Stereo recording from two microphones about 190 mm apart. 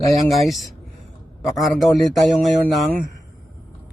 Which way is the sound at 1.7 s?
Centre (ahead or behind).